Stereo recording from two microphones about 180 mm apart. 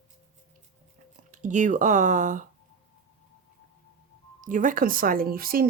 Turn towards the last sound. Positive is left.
turn(degrees=-55)  # may be behind; listen again after turning